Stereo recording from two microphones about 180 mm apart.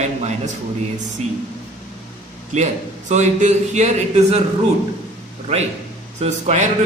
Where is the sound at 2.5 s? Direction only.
40° right (ahead or behind).